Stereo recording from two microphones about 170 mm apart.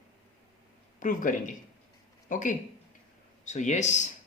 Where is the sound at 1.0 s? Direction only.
50° left (ahead or behind).